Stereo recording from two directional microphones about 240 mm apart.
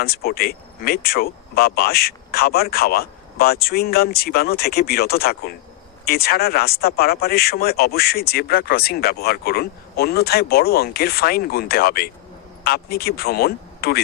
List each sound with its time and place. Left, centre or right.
0.0 s speech: left